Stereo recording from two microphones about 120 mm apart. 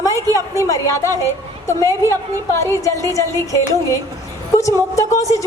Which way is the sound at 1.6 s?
25° left (ahead or behind).